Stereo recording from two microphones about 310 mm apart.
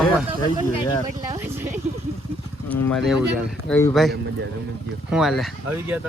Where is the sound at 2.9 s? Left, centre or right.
Centre.